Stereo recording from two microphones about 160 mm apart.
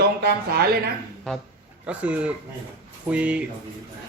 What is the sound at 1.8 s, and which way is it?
A man's voice, 5° right (ahead or behind).